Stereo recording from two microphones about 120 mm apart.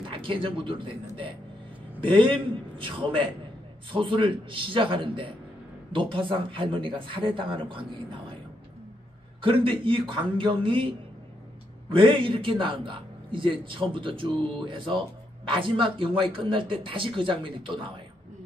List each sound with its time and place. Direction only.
0.1 s a man's voice: 45° right (ahead or behind)
2.0 s a man's voice: 45° right (ahead or behind)
9.4 s a man's voice: 45° right (ahead or behind)
11.9 s a man's voice: 45° right (ahead or behind)
15.5 s a man's voice: 45° right (ahead or behind)